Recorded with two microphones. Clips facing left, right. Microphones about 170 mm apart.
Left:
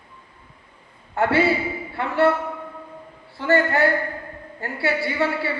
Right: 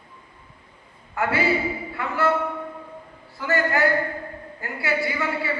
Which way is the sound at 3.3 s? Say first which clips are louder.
Left 4 dB; 30° left (ahead or behind).